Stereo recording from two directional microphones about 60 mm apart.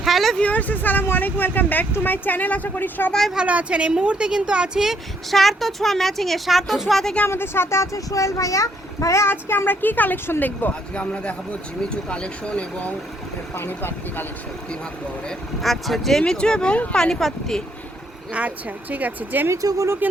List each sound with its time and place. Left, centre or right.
0.0 s a sound: centre
0.3 s speech: left
3.1 s speech: centre
3.3 s speech: right
5.3 s a woman's voice: centre
7.3 s speech: left
7.9 s speech: left
9.2 s speech: left; by 12.9 s centre
13.6 s speech: left
15.6 s speech: centre
17.0 s speech: centre
18.3 s a woman's voice: right
19.6 s speech: right